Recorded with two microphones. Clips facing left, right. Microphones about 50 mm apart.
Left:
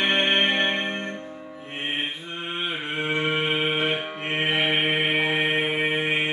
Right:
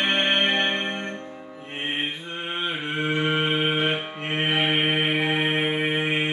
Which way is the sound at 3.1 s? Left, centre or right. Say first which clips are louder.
Even; centre.